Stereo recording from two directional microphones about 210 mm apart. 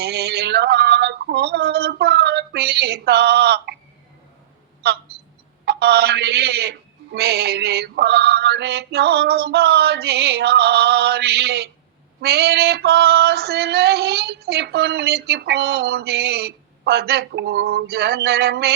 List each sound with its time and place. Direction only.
0.0 s a sound: 50° right (ahead or behind)
4.8 s a woman's voice: 50° right (ahead or behind)
5.6 s female singing: 50° right (ahead or behind)